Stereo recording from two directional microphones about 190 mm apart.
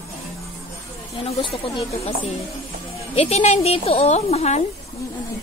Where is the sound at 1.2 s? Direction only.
30° left (ahead or behind).